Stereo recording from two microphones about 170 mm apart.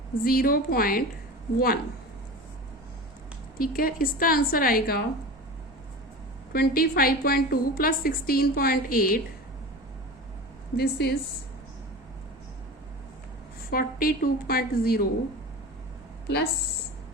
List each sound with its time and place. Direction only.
0.3 s a woman's voice: 60° left (ahead or behind)
3.6 s a woman's voice: 60° left (ahead or behind)
6.5 s a woman's voice: 65° left (ahead or behind)
10.8 s speech: 70° left (ahead or behind)
13.7 s a woman's voice: 60° left (ahead or behind)
16.2 s speech: 75° left (ahead or behind)